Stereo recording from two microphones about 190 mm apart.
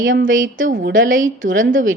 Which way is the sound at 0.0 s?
45° right (ahead or behind).